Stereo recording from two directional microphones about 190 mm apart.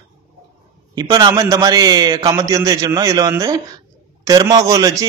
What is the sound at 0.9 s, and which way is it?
A man's voice, 20° right (ahead or behind).